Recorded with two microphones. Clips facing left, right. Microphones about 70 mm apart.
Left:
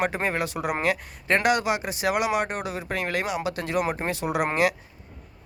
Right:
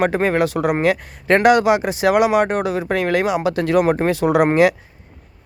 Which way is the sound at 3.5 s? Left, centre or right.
Right.